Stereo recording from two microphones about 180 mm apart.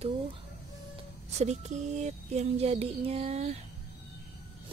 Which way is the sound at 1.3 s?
40° right (ahead or behind).